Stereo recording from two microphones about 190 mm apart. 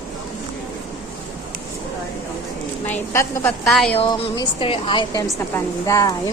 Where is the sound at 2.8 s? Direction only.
10° left (ahead or behind).